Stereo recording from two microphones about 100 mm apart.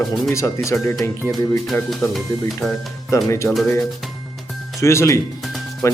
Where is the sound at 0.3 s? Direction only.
30° left (ahead or behind).